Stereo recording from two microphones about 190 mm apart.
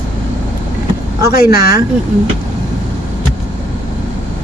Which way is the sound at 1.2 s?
15° right (ahead or behind).